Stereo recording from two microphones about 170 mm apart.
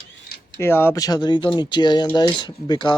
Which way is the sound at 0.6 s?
15° left (ahead or behind).